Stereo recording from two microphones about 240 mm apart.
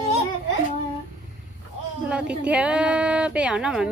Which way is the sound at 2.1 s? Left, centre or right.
Centre.